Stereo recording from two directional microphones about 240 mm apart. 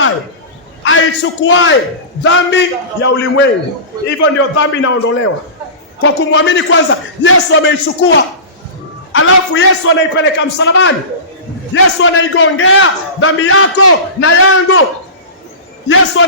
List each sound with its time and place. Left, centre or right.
0.9 s a man's voice: left
9.1 s a man's voice: left
16.2 s a man's voice: left